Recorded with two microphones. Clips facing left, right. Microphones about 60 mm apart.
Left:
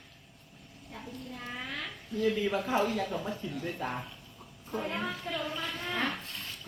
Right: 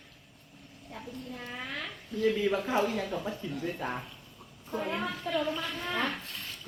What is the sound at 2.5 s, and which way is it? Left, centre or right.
Speech, right.